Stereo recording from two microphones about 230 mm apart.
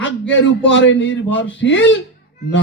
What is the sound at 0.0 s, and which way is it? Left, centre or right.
A man's voice, left.